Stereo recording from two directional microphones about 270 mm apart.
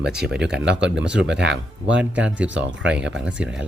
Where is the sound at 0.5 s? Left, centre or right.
Right.